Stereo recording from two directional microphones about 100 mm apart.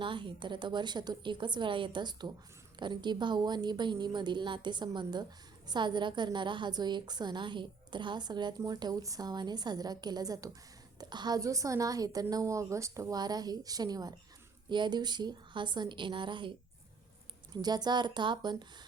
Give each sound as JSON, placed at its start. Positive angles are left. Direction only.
{"t": 0.0, "sound": "a woman's voice", "side_deg": -55}
{"t": 11.3, "sound": "a woman's voice", "side_deg": -35}
{"t": 17.5, "sound": "a woman's voice", "side_deg": -45}